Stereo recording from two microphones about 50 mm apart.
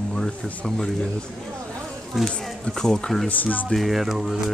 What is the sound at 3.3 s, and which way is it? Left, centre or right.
Speech, left.